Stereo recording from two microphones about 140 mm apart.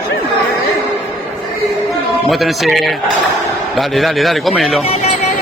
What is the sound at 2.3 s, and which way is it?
Speech, centre (ahead or behind).